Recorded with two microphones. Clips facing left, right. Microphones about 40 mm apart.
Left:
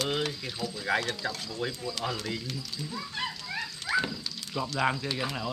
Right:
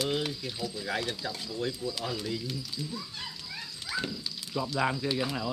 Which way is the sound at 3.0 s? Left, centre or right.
Left.